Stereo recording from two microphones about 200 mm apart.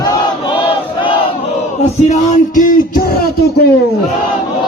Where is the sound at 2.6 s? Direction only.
40° left (ahead or behind).